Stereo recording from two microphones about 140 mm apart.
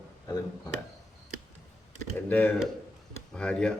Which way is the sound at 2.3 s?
10° left (ahead or behind).